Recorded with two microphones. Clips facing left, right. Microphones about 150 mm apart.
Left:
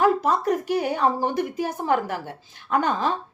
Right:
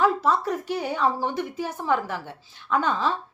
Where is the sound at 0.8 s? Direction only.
45° left (ahead or behind).